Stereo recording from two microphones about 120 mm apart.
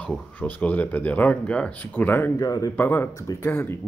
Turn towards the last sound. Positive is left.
turn(degrees=20)  # may be behind; listen again after turning